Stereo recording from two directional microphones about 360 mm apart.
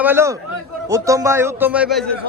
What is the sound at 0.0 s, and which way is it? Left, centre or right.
A man's voice, centre.